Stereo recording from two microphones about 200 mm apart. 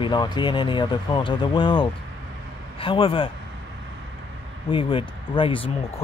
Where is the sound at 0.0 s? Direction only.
20° left (ahead or behind).